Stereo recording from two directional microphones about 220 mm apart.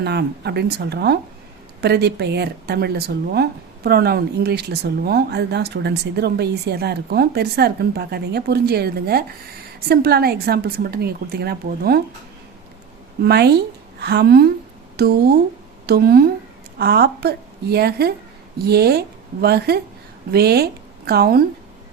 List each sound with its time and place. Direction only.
0.0 s speech: 50° right (ahead or behind)
13.2 s speech: 50° right (ahead or behind)